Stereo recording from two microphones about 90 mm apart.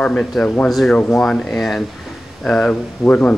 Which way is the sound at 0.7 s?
Centre (ahead or behind).